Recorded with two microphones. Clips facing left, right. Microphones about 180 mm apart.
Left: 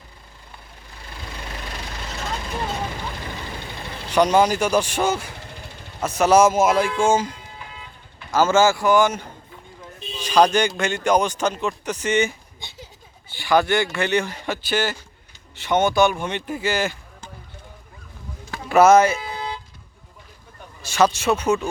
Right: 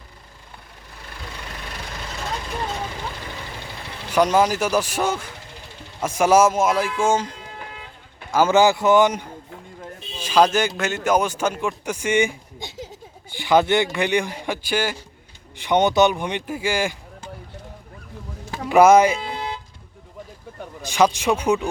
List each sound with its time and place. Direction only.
4.1 s speech: centre (ahead or behind)
6.0 s speech: 10° right (ahead or behind)
6.5 s speech: centre (ahead or behind)
8.3 s speech: 15° right (ahead or behind)
10.2 s speech: 5° right (ahead or behind)
18.7 s speech: 15° right (ahead or behind)
19.2 s music: 25° right (ahead or behind)
20.8 s speech: 15° right (ahead or behind)